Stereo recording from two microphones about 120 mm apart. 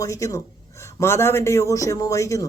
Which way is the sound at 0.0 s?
25° left (ahead or behind).